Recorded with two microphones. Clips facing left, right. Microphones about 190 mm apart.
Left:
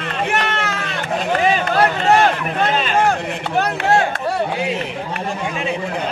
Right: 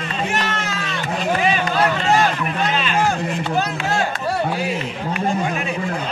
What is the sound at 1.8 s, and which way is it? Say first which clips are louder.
Chop: left 3 dB; 60° left (ahead or behind).